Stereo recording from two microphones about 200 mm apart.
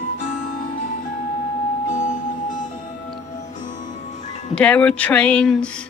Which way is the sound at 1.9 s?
40° left (ahead or behind).